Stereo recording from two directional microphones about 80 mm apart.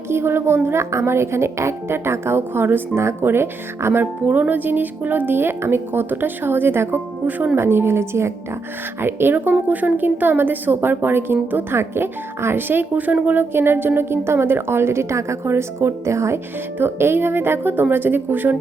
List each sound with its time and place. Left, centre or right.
0.1 s a woman's voice: right